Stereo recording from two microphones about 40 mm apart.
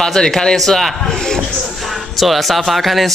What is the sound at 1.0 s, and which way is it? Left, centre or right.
Speech, centre.